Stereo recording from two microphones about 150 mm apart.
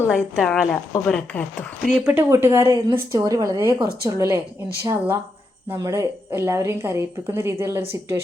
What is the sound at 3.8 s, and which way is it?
Speech, 90° right.